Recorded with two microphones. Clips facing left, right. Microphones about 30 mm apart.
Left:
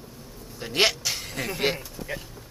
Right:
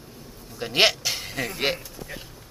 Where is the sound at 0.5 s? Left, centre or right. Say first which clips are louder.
Right 3 dB; centre.